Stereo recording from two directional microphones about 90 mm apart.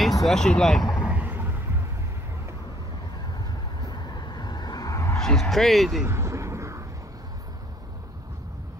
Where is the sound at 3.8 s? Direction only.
55° left (ahead or behind).